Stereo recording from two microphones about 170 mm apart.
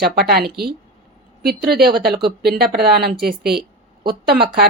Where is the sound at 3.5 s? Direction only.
65° right (ahead or behind).